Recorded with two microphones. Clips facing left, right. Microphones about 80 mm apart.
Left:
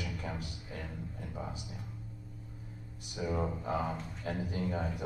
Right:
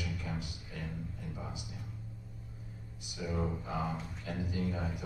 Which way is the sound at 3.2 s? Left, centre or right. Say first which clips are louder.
Left 2 dB; left.